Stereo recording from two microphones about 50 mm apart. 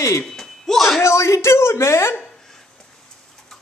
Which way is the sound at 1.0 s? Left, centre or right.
Left.